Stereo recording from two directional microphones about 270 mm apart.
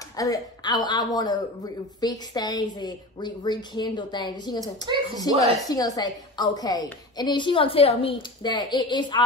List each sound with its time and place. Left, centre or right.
0.1 s a woman's voice: centre